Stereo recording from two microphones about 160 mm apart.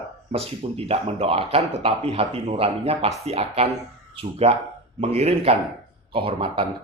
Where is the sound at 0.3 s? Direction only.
40° right (ahead or behind).